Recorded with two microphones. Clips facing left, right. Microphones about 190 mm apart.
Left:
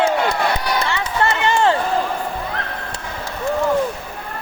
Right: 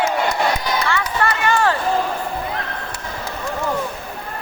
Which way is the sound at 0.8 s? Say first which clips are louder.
Even; 25° left (ahead or behind).